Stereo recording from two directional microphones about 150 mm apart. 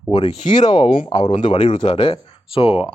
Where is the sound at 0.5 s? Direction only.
30° left (ahead or behind).